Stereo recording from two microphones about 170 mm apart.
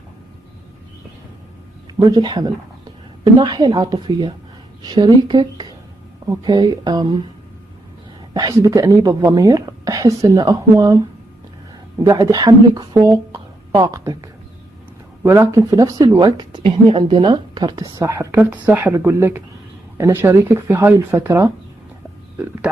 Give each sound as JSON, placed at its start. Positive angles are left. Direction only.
{"t": 2.0, "sound": "speech", "side_deg": -25}
{"t": 8.3, "sound": "speech", "side_deg": -20}
{"t": 12.0, "sound": "speech", "side_deg": -20}
{"t": 15.2, "sound": "speech", "side_deg": -15}